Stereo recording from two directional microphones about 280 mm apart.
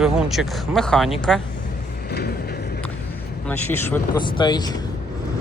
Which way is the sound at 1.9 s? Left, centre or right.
Left.